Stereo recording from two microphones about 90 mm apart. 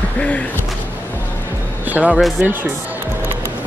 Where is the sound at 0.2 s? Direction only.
15° left (ahead or behind).